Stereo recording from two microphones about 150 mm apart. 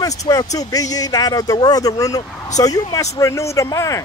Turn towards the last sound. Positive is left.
turn(degrees=20)  # may be behind; listen again after turning